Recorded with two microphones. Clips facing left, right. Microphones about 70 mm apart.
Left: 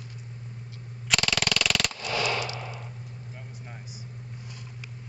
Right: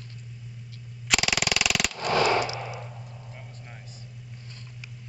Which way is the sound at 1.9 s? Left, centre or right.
Right.